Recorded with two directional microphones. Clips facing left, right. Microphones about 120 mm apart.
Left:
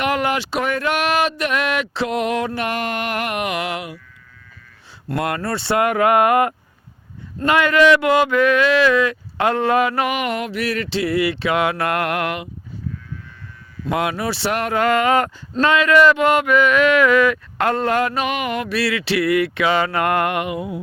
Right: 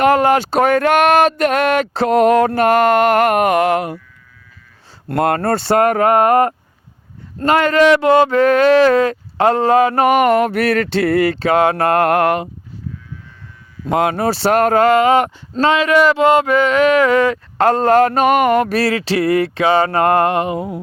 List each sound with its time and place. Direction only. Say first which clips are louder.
0.0 s speech: right 8 dB; 40° right (ahead or behind)
5.0 s speech: right 7 dB; 45° right (ahead or behind)
7.3 s a sound: right 3 dB; 40° right (ahead or behind)
13.9 s speech: right 6 dB; 40° right (ahead or behind)
14.8 s speech: right 5 dB; 25° right (ahead or behind)
15.5 s a sound: right 2 dB; 30° right (ahead or behind)